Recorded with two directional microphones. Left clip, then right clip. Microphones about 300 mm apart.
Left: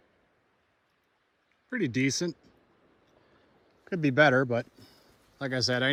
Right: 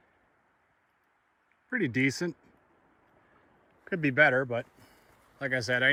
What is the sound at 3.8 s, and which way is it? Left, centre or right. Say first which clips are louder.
Speech: left 1 dB; centre.